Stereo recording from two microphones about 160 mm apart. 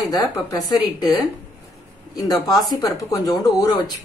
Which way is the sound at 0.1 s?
25° left (ahead or behind).